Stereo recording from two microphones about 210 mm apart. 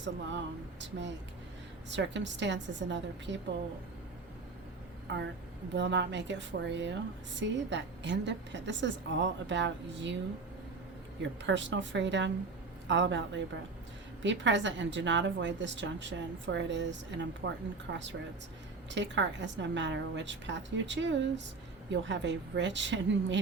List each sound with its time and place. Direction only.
0.0 s a woman's voice: 60° right (ahead or behind)
5.1 s a woman's voice: 55° right (ahead or behind)
11.2 s a woman's voice: 60° right (ahead or behind)